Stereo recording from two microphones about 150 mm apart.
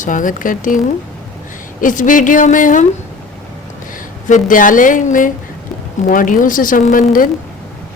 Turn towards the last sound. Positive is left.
turn(degrees=65)  # may be behind; listen again after turning